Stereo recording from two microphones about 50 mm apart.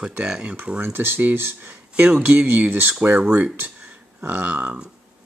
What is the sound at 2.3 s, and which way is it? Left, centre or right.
Speech, right.